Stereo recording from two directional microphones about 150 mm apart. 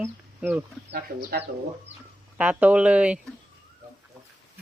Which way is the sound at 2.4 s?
10° right (ahead or behind).